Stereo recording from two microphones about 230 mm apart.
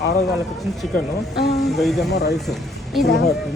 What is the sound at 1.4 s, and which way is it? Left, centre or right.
Speech, left.